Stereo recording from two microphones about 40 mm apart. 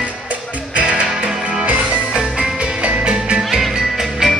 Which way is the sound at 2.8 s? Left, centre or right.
Right.